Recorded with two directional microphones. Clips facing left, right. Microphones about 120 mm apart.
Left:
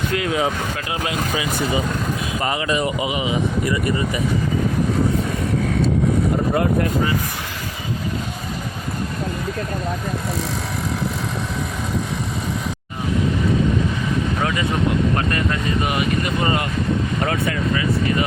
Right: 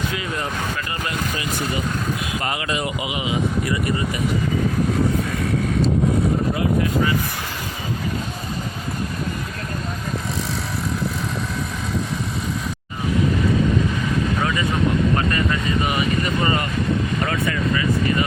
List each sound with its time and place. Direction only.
0.1 s speech: 80° left